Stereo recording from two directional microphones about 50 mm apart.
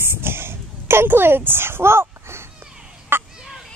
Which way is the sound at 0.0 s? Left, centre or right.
Right.